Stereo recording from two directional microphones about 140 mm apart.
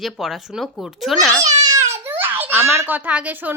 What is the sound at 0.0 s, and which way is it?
Speech, centre (ahead or behind).